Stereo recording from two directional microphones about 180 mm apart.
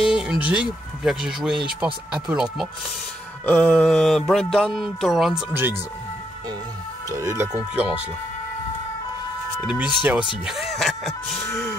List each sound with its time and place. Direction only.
0.0 s mantra: 5° right (ahead or behind)
3.4 s mantra: 10° left (ahead or behind)
7.1 s speech: 15° right (ahead or behind)
9.7 s mantra: centre (ahead or behind)
10.4 s music: centre (ahead or behind)